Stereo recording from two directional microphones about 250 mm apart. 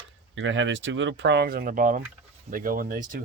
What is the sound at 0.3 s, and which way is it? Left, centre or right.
Speech, right.